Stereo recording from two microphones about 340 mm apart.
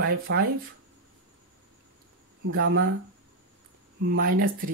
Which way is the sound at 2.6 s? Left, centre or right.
Right.